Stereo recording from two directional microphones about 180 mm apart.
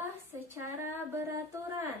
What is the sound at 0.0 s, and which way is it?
Female singing, 15° right (ahead or behind).